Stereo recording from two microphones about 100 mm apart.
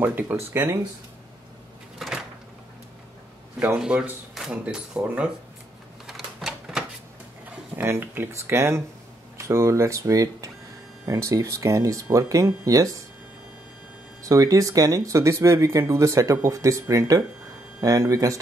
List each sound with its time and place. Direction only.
0.0 s speech: 20° right (ahead or behind)
2.0 s cupboard open or close: 5° right (ahead or behind)
3.5 s speech: 10° right (ahead or behind)
6.0 s typewriter: 5° right (ahead or behind)
7.7 s speech: 20° right (ahead or behind)
14.3 s speech: 35° right (ahead or behind)